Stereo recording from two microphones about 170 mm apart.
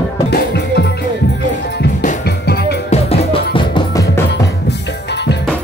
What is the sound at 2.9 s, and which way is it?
Music, 35° left (ahead or behind).